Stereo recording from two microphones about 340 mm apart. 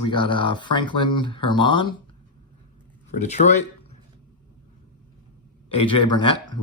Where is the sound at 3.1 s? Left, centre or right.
Centre.